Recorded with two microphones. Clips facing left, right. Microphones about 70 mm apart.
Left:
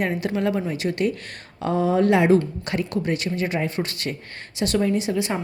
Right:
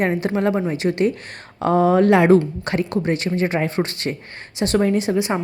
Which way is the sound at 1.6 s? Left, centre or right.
Right.